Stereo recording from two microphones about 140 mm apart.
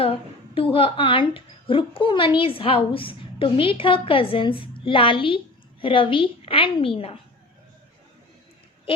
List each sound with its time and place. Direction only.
0.0 s a woman's voice: 40° left (ahead or behind)